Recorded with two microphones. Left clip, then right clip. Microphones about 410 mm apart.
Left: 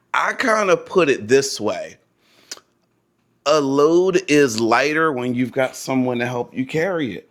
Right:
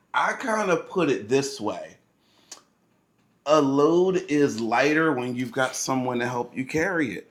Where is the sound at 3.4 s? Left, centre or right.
Left.